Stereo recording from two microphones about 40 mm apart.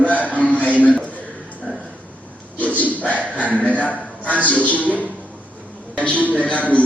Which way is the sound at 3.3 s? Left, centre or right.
Left.